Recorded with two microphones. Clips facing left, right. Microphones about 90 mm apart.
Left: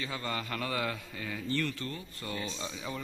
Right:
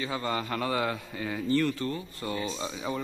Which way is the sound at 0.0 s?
15° right (ahead or behind).